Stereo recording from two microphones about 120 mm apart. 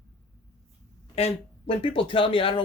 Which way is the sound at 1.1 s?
55° left (ahead or behind).